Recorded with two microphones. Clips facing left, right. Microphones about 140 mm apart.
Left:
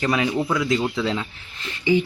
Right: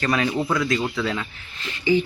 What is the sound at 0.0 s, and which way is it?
Speech, 15° left (ahead or behind).